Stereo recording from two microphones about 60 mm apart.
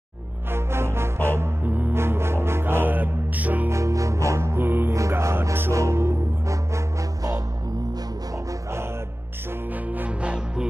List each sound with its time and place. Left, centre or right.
0.5 s music: right
1.7 s music: right
2.0 s music: right
3.7 s music: right
4.6 s music: right
5.2 s music: right
9.7 s music: right